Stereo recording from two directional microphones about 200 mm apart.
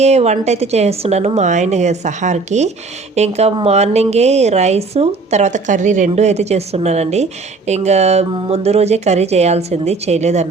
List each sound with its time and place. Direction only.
0.0 s a woman's voice: 35° right (ahead or behind)